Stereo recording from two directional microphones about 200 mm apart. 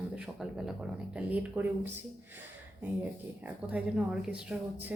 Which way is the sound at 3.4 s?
5° right (ahead or behind).